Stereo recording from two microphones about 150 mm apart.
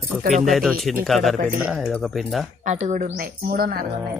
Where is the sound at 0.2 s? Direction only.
60° right (ahead or behind).